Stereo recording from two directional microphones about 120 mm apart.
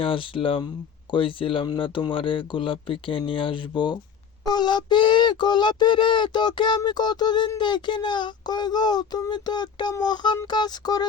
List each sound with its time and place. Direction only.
0.0 s speech: 45° left (ahead or behind)